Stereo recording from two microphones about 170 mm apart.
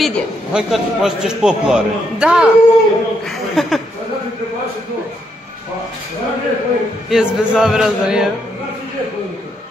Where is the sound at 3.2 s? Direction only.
Centre (ahead or behind).